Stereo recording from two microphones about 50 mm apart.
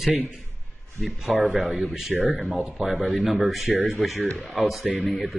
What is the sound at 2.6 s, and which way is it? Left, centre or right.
A man's voice, centre.